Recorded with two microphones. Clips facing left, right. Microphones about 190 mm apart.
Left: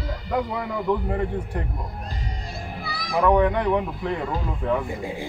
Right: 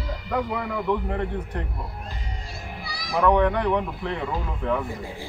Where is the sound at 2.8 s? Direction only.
55° left (ahead or behind).